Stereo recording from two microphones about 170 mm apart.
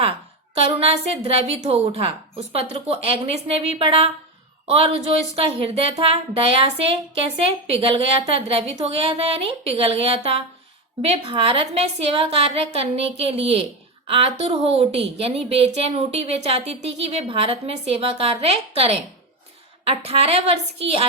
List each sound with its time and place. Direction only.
0.5 s a woman's voice: 35° right (ahead or behind)